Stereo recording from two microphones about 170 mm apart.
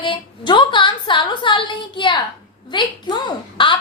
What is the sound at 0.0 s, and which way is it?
A woman's voice, 30° left (ahead or behind).